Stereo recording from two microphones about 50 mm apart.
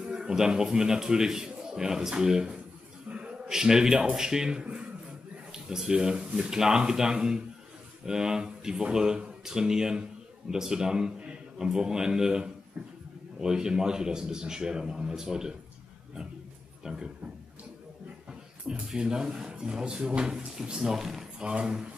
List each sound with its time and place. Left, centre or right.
0.0 s a man's voice: centre
16.8 s a man's voice: centre
18.9 s a man's voice: centre
21.4 s a man's voice: centre